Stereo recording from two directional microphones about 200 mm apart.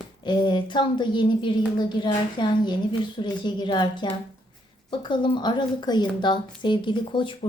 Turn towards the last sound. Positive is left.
turn(degrees=25)  # may be behind; listen again after turning